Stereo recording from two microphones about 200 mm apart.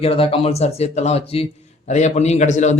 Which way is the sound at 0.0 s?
30° left (ahead or behind).